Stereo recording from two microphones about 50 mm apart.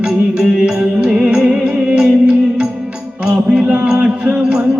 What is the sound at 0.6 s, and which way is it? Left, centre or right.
Music, centre.